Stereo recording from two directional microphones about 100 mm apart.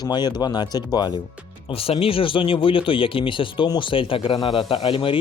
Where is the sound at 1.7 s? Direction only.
70° left (ahead or behind).